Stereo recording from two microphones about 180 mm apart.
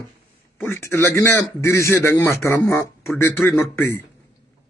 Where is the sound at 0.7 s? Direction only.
15° left (ahead or behind).